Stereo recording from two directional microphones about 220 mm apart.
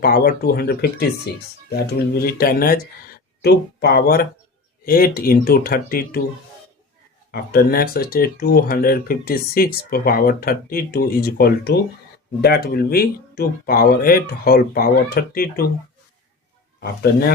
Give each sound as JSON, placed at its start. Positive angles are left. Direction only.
{"t": 0.0, "sound": "speech", "side_deg": 45}
{"t": 7.3, "sound": "speech", "side_deg": 45}
{"t": 16.8, "sound": "speech", "side_deg": 45}